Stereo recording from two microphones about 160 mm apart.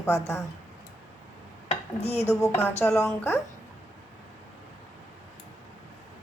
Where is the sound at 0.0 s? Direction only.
20° left (ahead or behind).